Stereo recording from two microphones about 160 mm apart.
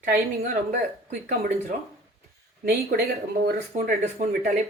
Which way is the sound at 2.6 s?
70° right (ahead or behind).